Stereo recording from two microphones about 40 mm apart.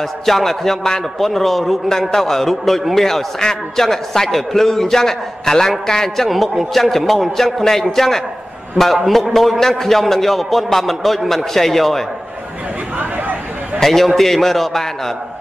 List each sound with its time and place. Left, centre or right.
0.2 s a man's voice: centre
13.7 s a man's voice: centre